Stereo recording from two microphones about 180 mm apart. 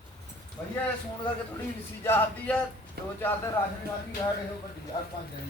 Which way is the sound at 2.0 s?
10° left (ahead or behind).